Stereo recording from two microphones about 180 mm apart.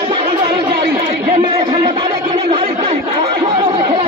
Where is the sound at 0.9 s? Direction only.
55° right (ahead or behind).